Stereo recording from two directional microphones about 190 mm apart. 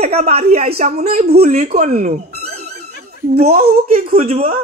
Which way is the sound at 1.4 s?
35° right (ahead or behind).